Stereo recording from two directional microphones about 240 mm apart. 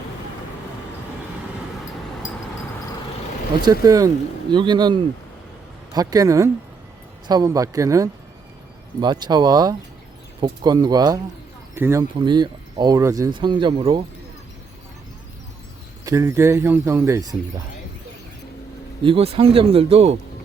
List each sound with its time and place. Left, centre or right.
3.7 s speech: centre
16.0 s speech: centre
19.0 s speech: right